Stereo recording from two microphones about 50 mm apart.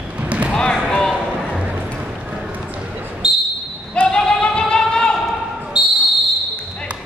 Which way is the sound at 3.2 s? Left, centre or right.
Centre.